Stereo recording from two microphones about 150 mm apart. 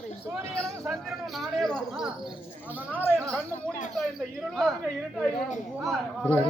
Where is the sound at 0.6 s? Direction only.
Centre (ahead or behind).